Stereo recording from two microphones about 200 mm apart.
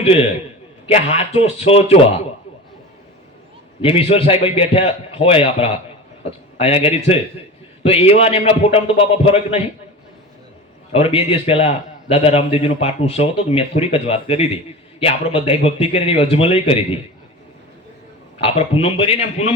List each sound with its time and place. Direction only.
0.0 s a man's voice: 30° left (ahead or behind)
3.8 s a man's voice: 30° left (ahead or behind)
10.9 s a man's voice: 30° left (ahead or behind)
18.4 s a man's voice: 30° left (ahead or behind)